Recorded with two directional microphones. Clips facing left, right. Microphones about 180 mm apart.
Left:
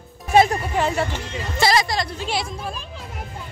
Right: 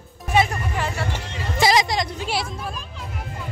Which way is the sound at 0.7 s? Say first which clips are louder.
Left 7 dB; 25° left (ahead or behind).